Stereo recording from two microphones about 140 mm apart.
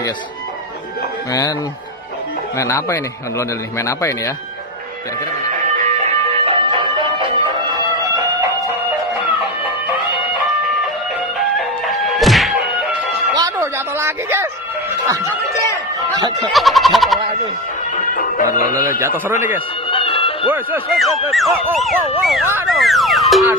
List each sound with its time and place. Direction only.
2.5 s a man's voice: 20° left (ahead or behind)
5.5 s music: 60° right (ahead or behind)
6.3 s music: 40° right (ahead or behind)
11.5 s music: centre (ahead or behind)
13.3 s a sound: 25° right (ahead or behind)
16.4 s speech: centre (ahead or behind)
18.6 s speech: 90° left
18.9 s a man's voice: 15° right (ahead or behind)
19.9 s music: 40° left (ahead or behind)
20.9 s speech: centre (ahead or behind)